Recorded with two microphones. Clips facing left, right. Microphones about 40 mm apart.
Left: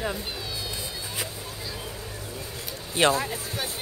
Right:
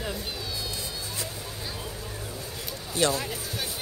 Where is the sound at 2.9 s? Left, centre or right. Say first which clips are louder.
Left 4 dB; left.